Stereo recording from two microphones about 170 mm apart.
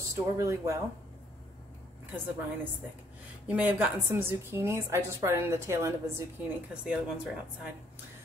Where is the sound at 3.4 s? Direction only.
10° right (ahead or behind).